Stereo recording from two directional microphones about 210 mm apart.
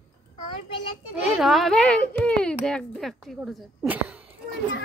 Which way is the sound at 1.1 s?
Centre (ahead or behind).